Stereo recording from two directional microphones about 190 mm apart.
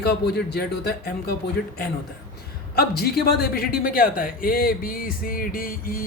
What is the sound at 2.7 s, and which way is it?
A man's voice, 55° left (ahead or behind).